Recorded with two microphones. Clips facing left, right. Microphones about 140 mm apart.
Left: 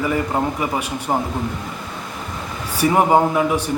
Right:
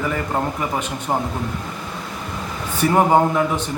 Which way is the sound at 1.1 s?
10° left (ahead or behind).